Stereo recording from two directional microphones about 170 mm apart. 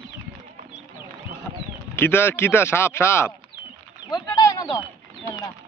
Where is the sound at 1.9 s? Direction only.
15° left (ahead or behind).